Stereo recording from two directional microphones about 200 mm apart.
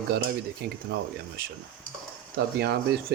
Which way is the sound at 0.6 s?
50° right (ahead or behind).